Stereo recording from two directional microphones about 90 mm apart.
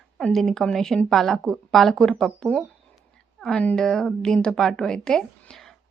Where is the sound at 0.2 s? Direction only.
5° left (ahead or behind).